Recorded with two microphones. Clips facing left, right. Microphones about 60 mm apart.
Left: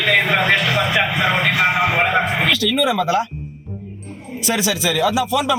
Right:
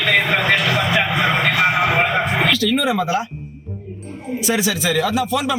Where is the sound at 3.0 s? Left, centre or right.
Left.